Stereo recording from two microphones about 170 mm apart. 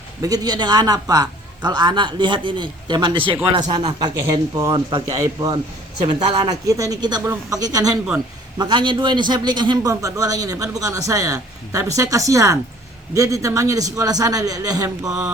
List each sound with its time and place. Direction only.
0.2 s a man's voice: 20° right (ahead or behind)
15.0 s mantra: 5° right (ahead or behind)